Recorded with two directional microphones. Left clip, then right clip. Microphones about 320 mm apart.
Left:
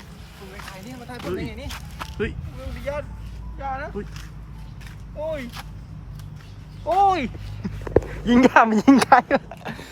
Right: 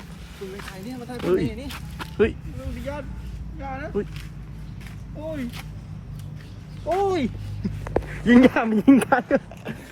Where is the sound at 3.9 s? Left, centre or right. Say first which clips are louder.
Right 6 dB; centre.